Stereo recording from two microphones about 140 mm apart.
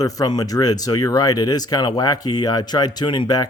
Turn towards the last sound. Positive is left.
turn(degrees=30)  # may be behind; listen again after turning